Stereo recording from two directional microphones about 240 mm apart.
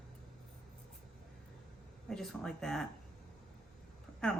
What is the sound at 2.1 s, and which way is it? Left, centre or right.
Speech, centre.